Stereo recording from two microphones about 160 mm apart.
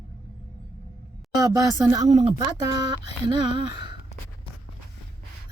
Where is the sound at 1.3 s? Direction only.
20° right (ahead or behind).